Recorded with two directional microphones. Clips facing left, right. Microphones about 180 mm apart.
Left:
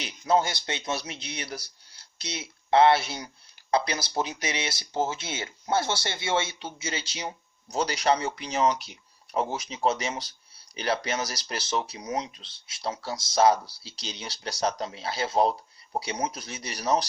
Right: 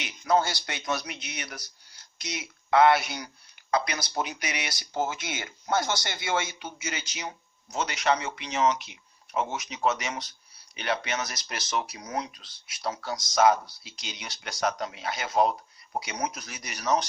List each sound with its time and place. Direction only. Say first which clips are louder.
0.3 s speech: even; 20° left (ahead or behind)